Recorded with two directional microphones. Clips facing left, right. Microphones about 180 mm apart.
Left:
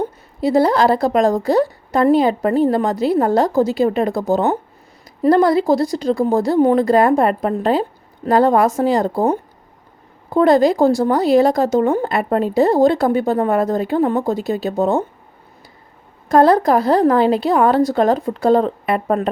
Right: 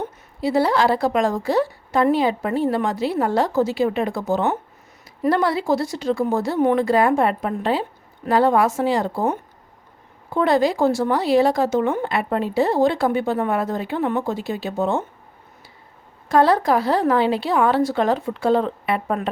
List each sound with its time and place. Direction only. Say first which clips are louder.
0.4 s speech: left 4 dB; 40° left (ahead or behind)
16.3 s speech: left 4 dB; 40° left (ahead or behind)